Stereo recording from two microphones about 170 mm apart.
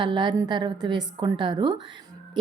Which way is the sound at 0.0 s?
30° right (ahead or behind).